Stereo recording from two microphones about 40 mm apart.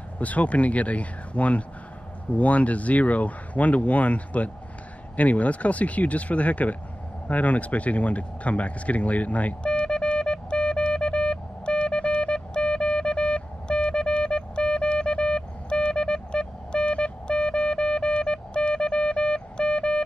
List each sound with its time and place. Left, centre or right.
0.2 s speech: left
9.6 s music: left